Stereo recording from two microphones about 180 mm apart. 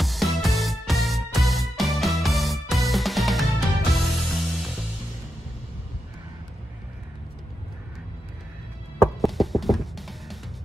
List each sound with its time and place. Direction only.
0.0 s music: centre (ahead or behind)
9.2 s music: centre (ahead or behind)